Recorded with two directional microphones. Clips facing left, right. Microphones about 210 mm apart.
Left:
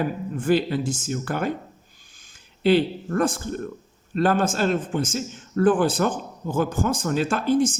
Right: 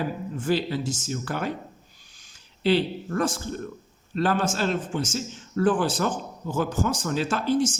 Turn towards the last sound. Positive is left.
turn(degrees=55)  # may be behind; listen again after turning